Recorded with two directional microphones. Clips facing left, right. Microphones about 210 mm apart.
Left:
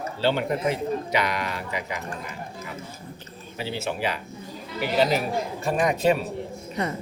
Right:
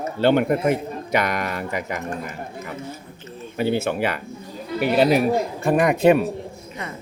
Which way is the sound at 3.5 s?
55° right (ahead or behind).